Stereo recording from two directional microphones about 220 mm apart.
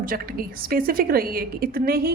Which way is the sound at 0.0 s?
40° right (ahead or behind).